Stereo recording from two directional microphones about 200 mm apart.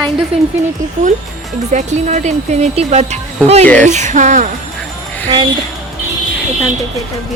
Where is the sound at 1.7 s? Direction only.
35° right (ahead or behind).